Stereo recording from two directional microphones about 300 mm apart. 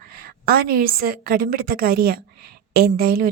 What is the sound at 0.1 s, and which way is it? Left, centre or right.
A woman's voice, right.